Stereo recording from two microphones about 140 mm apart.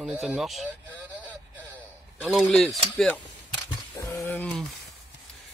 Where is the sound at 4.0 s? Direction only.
25° left (ahead or behind).